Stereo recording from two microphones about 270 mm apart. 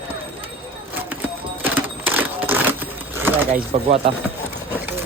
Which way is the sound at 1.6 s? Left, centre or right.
Centre.